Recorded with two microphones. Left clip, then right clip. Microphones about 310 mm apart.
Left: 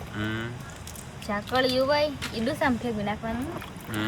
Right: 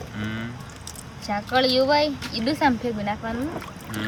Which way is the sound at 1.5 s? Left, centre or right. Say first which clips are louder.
Right 4 dB; centre.